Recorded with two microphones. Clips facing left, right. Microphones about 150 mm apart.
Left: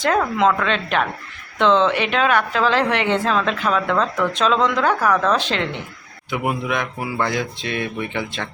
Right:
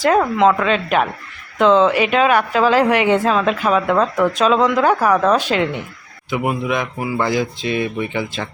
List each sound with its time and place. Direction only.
0.3 s speech: 5° right (ahead or behind)